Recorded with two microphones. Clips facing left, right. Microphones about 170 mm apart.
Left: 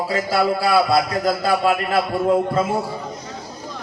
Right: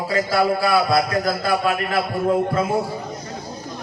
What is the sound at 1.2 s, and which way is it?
Speech, 30° left (ahead or behind).